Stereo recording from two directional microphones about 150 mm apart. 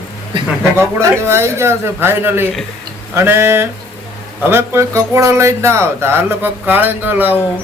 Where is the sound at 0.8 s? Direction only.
15° right (ahead or behind).